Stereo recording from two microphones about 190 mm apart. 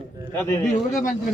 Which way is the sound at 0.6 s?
40° left (ahead or behind).